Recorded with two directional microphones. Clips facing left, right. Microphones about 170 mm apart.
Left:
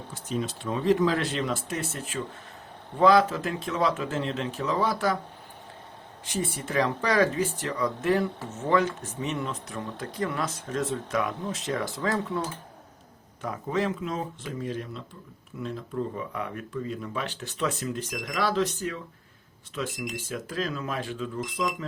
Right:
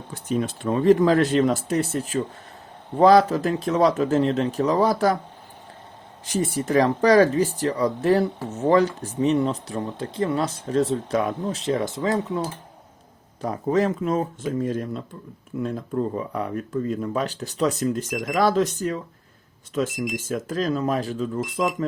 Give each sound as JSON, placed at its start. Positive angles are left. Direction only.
{"t": 0.1, "sound": "speech", "side_deg": -55}
{"t": 6.2, "sound": "speech", "side_deg": -40}
{"t": 13.4, "sound": "speech", "side_deg": -40}